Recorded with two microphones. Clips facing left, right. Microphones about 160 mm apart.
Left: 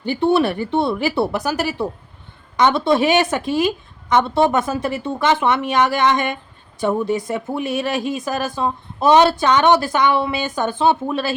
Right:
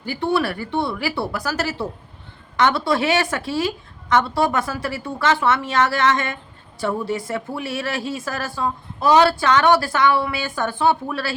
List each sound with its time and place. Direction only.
0.0 s speech: 25° left (ahead or behind)